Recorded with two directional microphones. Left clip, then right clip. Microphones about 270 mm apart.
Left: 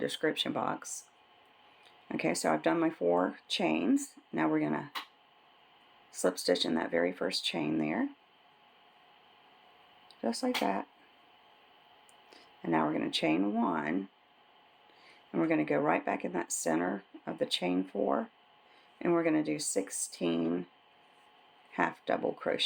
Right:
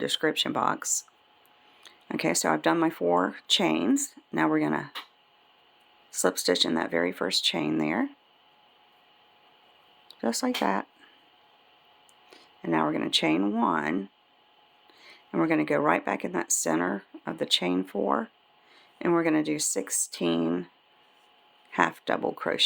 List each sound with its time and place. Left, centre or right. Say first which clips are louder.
0.0 s speech: right 6 dB; centre
6.1 s speech: right 4 dB; centre
10.1 s speech: right 4 dB; right
12.3 s speech: right 4 dB; centre
15.0 s speech: right 5 dB; right
21.7 s speech: right 6 dB; right